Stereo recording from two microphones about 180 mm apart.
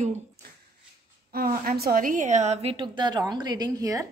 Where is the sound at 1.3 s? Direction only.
55° right (ahead or behind); by 4.0 s 20° right (ahead or behind).